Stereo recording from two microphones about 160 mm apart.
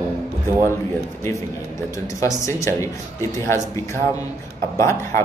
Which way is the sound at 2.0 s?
20° left (ahead or behind).